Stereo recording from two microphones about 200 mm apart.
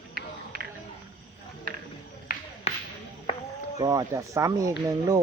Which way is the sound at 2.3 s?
45° left (ahead or behind).